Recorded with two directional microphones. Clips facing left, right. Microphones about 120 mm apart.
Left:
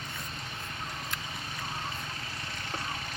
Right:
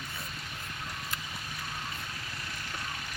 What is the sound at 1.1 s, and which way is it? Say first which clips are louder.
Clip-clop: left 1 dB; centre (ahead or behind).